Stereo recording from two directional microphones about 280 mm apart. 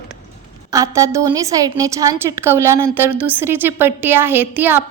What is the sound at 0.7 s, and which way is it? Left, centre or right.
A woman's voice, centre.